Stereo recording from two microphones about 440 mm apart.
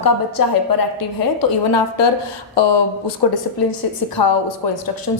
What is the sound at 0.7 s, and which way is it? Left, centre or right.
A woman's voice, left.